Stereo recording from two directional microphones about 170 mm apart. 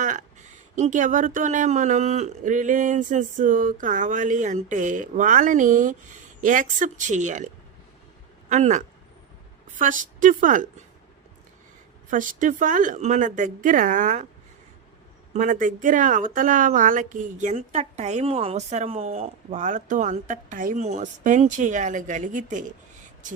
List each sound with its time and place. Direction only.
0.0 s speech: 45° right (ahead or behind)
8.4 s speech: 45° right (ahead or behind)
12.1 s speech: 50° right (ahead or behind)
15.3 s speech: 50° right (ahead or behind)